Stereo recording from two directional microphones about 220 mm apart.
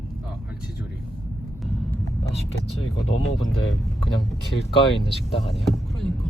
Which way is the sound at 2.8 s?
65° left (ahead or behind).